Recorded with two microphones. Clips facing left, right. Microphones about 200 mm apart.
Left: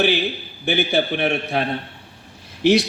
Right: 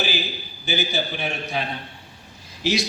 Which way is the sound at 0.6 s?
60° left (ahead or behind).